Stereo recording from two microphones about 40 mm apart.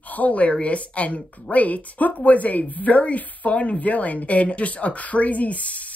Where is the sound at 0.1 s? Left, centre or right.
Left.